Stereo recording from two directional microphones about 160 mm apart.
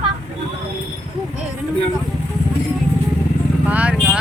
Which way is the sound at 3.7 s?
10° right (ahead or behind).